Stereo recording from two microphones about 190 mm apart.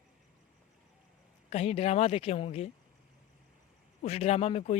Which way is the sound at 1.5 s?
35° left (ahead or behind).